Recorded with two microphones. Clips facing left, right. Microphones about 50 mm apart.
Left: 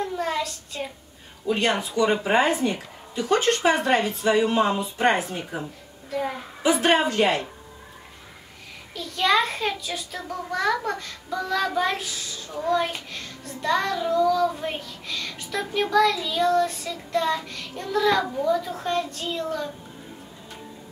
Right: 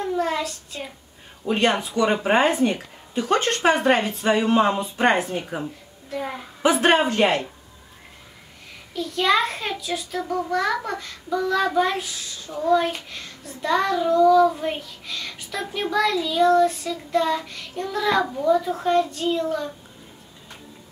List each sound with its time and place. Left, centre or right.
0.0 s a sound: centre
0.7 s a child's voice: centre
1.5 s speech: right
2.7 s speech: right
5.6 s a child's voice: centre
6.6 s speech: right
8.9 s a child's voice: centre